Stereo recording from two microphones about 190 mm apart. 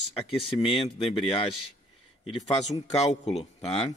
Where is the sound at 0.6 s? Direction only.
25° left (ahead or behind).